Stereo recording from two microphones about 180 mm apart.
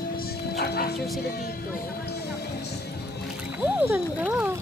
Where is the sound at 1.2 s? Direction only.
60° left (ahead or behind).